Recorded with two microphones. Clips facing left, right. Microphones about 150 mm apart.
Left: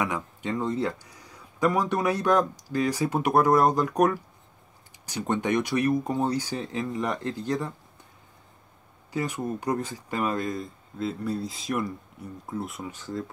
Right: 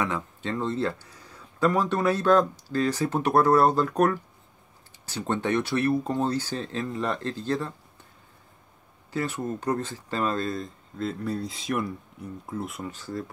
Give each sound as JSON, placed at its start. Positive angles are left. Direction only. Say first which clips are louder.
{"t": 0.0, "sound": "speech", "louder": "even", "side_deg": 15}
{"t": 9.1, "sound": "speech", "louder": "even", "side_deg": 15}
{"t": 12.9, "sound": "speech", "louder": "even", "side_deg": 20}